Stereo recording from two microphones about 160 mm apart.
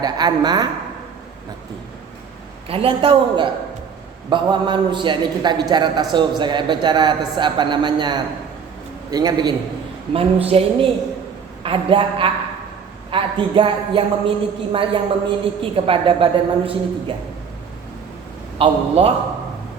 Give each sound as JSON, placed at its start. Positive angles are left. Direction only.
{"t": 0.0, "sound": "a man's voice", "side_deg": -25}
{"t": 2.6, "sound": "a man's voice", "side_deg": -35}
{"t": 10.1, "sound": "a man's voice", "side_deg": -35}
{"t": 18.6, "sound": "a man's voice", "side_deg": -40}